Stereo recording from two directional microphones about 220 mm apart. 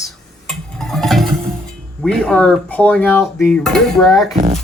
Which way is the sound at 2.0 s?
Centre (ahead or behind).